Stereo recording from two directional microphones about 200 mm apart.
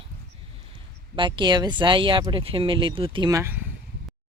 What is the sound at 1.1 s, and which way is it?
Speech, 25° right (ahead or behind).